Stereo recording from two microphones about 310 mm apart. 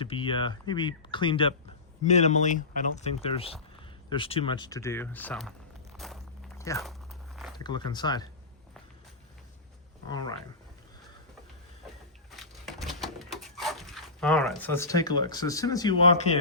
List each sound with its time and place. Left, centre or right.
0.0 s speech: centre
6.6 s walk: centre
7.6 s speech: centre
10.1 s speech: centre
12.4 s dog: centre